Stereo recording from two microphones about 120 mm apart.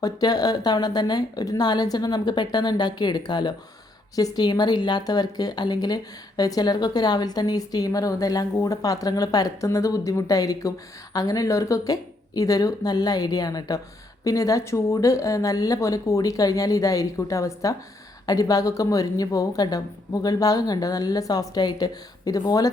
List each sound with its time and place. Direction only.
0.0 s a woman's voice: 35° left (ahead or behind)